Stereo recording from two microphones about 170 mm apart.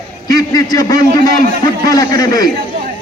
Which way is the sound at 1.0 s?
65° right (ahead or behind).